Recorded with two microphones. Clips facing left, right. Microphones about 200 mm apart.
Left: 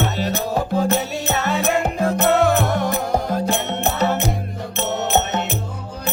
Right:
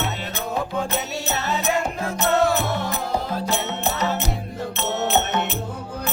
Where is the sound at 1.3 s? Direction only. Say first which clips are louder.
Left 4 dB; 60° left (ahead or behind).